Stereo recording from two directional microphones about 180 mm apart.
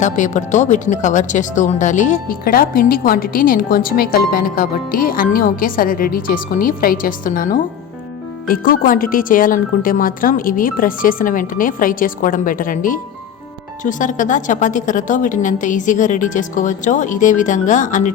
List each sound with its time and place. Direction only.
0.0 s a woman's voice: 45° left (ahead or behind)